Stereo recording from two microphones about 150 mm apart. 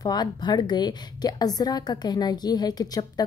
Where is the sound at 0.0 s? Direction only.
25° left (ahead or behind).